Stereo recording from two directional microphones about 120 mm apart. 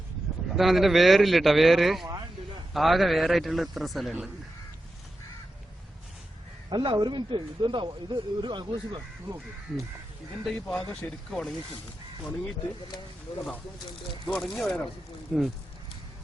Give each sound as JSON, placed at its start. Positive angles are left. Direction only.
{"t": 0.5, "sound": "speech", "side_deg": 0}
{"t": 6.7, "sound": "a man's voice", "side_deg": -35}
{"t": 10.4, "sound": "speech", "side_deg": 5}
{"t": 14.3, "sound": "speech", "side_deg": 5}